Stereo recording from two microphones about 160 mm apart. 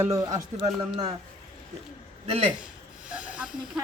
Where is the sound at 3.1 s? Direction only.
10° right (ahead or behind).